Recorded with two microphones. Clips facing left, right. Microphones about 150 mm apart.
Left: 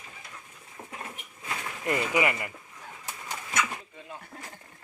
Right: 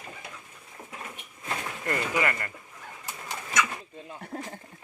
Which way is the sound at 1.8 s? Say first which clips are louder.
Left 2 dB; 15° left (ahead or behind).